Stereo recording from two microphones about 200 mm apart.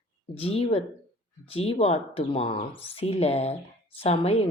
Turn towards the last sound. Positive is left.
turn(degrees=30)  # may be behind; listen again after turning